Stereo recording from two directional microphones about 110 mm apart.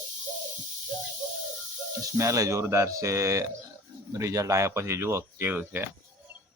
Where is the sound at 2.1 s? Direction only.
30° right (ahead or behind).